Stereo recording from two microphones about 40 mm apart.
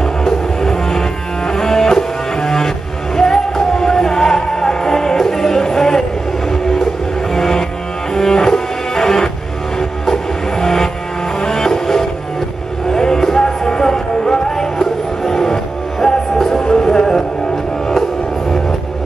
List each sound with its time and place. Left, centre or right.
0.0 s music: centre